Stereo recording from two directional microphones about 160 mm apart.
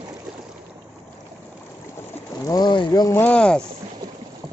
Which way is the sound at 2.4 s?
25° left (ahead or behind).